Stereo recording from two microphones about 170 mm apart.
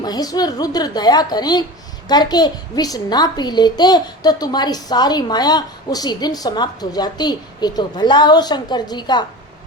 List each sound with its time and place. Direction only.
0.0 s a child's voice: 25° left (ahead or behind)